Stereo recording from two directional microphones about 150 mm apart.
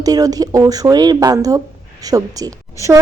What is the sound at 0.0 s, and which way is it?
A woman's voice, 25° right (ahead or behind).